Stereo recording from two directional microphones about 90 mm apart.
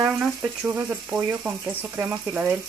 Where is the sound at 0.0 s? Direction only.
15° right (ahead or behind).